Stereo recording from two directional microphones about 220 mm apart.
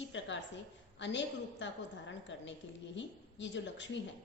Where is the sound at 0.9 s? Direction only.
55° left (ahead or behind).